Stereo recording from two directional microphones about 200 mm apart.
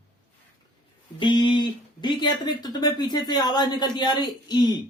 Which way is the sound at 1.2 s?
25° left (ahead or behind).